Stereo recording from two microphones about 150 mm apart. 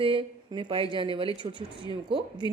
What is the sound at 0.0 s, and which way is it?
Speech, 35° right (ahead or behind).